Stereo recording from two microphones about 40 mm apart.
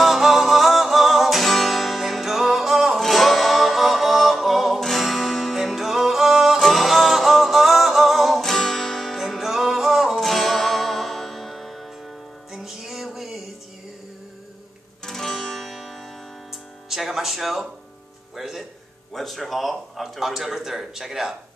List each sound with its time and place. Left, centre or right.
0.0 s music: centre
9.2 s music: centre
12.5 s music: centre
15.0 s music: centre
19.1 s a sound: centre